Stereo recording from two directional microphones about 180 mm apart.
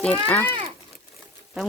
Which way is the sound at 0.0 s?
10° left (ahead or behind).